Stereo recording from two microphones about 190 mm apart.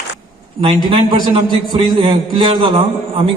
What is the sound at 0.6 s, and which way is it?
A man's voice, 25° right (ahead or behind).